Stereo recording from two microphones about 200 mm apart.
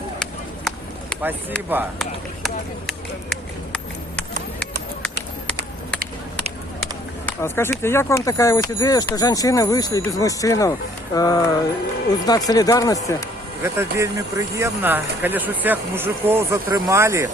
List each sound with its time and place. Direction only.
1.2 s speech: 10° right (ahead or behind)
7.3 s speech: 10° left (ahead or behind)
13.6 s speech: 15° right (ahead or behind)